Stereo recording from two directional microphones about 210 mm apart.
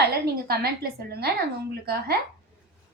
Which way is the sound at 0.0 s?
50° right (ahead or behind).